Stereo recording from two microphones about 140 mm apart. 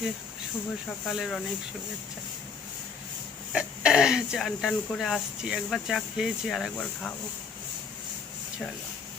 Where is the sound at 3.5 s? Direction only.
5° right (ahead or behind).